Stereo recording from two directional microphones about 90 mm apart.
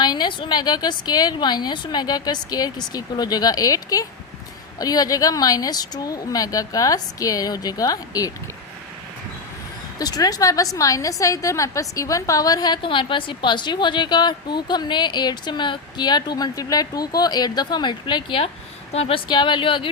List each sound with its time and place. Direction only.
0.0 s a woman's voice: 55° left (ahead or behind)
10.0 s a woman's voice: 45° left (ahead or behind); by 18.5 s 80° left
19.3 s speech: 60° left (ahead or behind)